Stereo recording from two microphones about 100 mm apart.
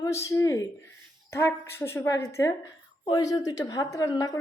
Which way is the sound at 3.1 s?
45° left (ahead or behind).